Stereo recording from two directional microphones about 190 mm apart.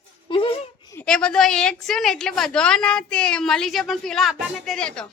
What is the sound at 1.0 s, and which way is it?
A woman's voice, 5° left (ahead or behind).